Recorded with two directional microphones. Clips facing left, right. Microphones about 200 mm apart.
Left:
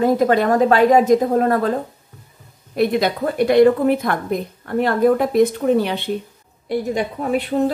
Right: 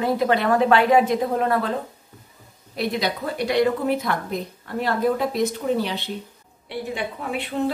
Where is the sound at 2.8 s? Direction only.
50° left (ahead or behind).